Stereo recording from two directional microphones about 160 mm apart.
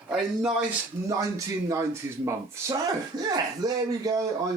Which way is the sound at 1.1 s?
20° right (ahead or behind).